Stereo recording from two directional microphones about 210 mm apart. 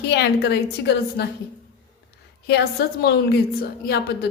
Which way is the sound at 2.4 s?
50° left (ahead or behind).